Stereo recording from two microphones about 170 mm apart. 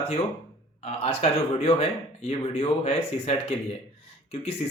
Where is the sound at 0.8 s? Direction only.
35° left (ahead or behind).